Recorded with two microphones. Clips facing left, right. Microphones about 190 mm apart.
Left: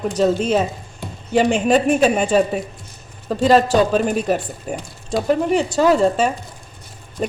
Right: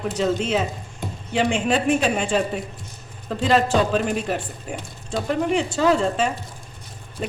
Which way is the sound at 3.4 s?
40° left (ahead or behind).